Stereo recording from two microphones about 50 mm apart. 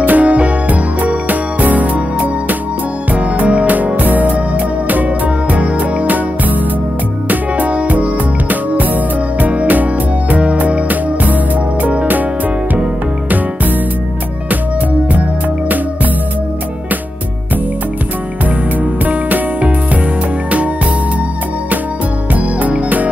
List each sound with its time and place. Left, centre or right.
0.0 s music: right
19.0 s music: right
22.3 s music: right